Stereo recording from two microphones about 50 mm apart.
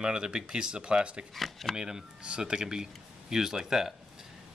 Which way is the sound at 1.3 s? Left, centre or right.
Centre.